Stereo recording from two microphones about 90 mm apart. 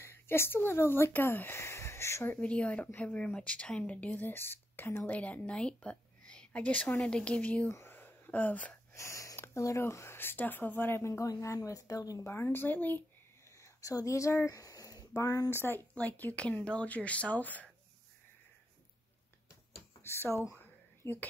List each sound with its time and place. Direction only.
0.0 s speech: 25° left (ahead or behind)
2.3 s speech: 15° left (ahead or behind)
7.7 s a sound: 25° left (ahead or behind)
8.9 s speech: 35° left (ahead or behind)
12.2 s speech: 30° left (ahead or behind)
13.6 s speech: 40° left (ahead or behind)
15.5 s speech: 25° left (ahead or behind)
15.9 s speech: 15° left (ahead or behind)
20.0 s speech: 30° left (ahead or behind)